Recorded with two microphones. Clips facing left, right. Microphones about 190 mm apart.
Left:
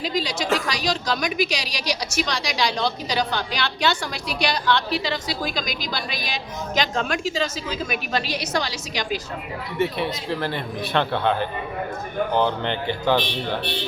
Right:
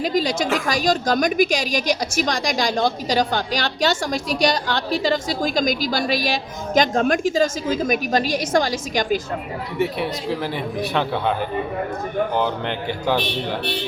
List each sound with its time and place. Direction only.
0.0 s a woman's voice: 50° right (ahead or behind)
9.7 s speech: 5° right (ahead or behind)